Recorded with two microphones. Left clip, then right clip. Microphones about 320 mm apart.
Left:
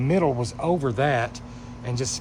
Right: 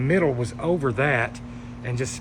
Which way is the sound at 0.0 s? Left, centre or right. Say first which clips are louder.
Right 1 dB; centre.